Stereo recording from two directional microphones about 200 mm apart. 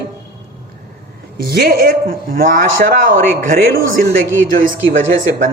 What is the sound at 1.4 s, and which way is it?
Speech, 45° right (ahead or behind).